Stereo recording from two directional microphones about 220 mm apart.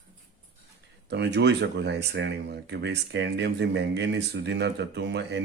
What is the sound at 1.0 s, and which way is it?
Speech, 50° right (ahead or behind).